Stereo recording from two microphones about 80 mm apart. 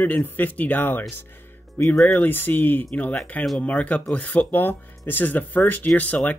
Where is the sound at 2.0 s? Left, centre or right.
Left.